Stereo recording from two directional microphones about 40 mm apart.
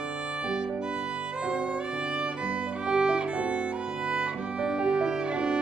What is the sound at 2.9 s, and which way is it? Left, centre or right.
Violin, right.